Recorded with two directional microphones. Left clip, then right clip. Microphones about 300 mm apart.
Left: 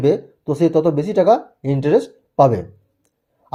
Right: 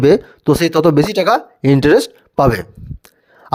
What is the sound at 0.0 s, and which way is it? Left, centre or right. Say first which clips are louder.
Speech: right 6 dB; right.